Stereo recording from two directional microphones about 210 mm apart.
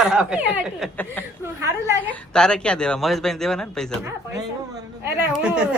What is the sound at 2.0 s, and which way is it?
A man's voice, 5° left (ahead or behind).